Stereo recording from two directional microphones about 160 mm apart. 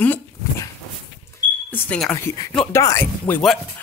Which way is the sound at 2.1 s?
20° left (ahead or behind).